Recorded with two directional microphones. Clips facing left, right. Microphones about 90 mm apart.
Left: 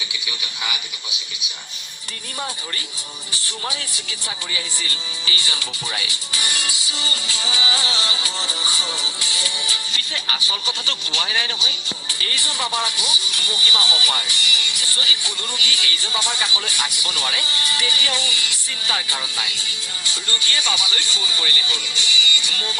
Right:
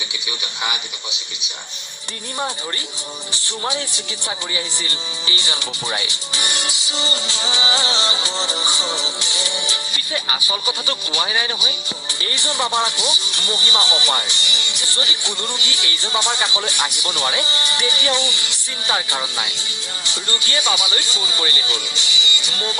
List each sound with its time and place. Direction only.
3.4 s speech: 25° right (ahead or behind)